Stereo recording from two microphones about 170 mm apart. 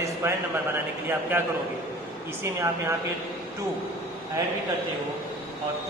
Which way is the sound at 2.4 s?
15° right (ahead or behind).